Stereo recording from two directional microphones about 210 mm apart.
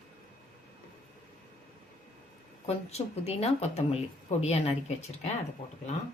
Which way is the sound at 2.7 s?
30° left (ahead or behind).